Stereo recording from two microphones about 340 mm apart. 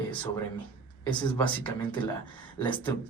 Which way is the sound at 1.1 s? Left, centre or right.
Centre.